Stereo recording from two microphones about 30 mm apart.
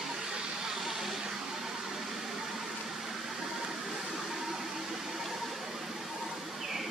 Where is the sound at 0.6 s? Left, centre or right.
Centre.